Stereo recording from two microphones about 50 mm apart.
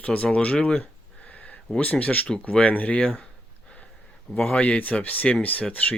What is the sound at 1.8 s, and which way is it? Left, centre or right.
Speech, left.